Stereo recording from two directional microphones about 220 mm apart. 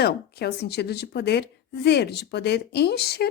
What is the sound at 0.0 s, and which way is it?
Speech, 45° left (ahead or behind).